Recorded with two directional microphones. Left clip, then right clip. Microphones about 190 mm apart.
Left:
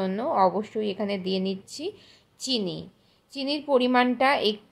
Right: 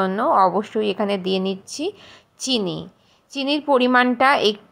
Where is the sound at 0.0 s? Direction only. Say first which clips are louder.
Right 6 dB; 15° right (ahead or behind).